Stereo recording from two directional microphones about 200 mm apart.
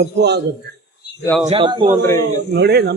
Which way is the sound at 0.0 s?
60° right (ahead or behind).